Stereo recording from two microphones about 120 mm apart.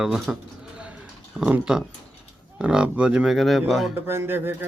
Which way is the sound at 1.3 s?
5° right (ahead or behind).